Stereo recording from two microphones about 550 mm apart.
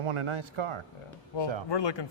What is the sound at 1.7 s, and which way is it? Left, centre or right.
Speech, left.